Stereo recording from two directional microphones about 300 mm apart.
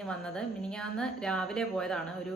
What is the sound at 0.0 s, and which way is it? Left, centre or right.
A woman's voice, centre.